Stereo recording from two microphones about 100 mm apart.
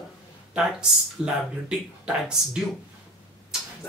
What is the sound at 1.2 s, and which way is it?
Speech, 10° right (ahead or behind).